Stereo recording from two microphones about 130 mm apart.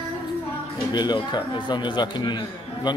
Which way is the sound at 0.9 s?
35° left (ahead or behind).